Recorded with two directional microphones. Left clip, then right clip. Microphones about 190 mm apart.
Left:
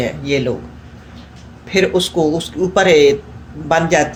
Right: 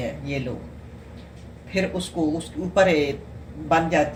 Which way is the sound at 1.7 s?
50° left (ahead or behind).